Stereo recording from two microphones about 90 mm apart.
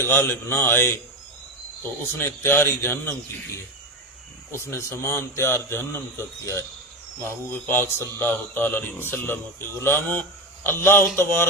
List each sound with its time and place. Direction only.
0.0 s speech: 25° left (ahead or behind)
4.5 s speech: 30° left (ahead or behind)